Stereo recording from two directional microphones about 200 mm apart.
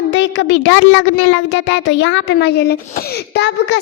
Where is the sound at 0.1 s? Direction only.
60° left (ahead or behind).